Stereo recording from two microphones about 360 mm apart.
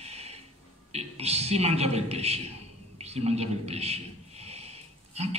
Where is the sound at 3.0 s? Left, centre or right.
Centre.